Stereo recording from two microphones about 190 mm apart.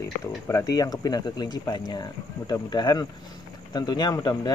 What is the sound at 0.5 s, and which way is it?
Speech, 15° left (ahead or behind).